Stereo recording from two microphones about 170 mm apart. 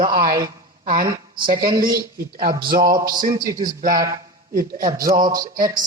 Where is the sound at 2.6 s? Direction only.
60° right (ahead or behind).